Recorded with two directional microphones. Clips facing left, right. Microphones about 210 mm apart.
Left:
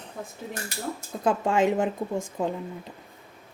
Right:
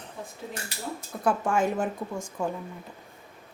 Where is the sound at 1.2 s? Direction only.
20° left (ahead or behind).